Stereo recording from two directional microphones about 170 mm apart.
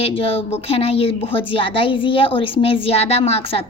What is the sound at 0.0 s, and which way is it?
A woman's voice, 35° left (ahead or behind).